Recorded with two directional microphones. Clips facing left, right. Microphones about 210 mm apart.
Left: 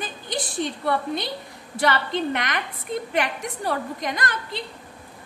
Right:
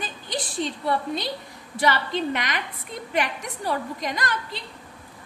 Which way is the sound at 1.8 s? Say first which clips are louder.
Left 1 dB; 55° left (ahead or behind).